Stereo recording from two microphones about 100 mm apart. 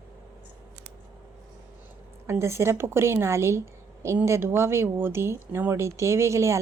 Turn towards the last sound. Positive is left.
turn(degrees=-30)  # may be behind; listen again after turning